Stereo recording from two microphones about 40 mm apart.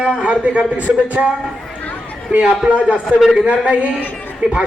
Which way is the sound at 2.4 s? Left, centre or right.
Right.